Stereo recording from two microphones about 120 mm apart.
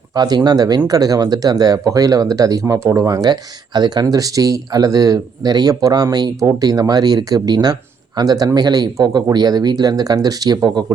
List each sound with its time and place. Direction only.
0.1 s speech: 35° right (ahead or behind)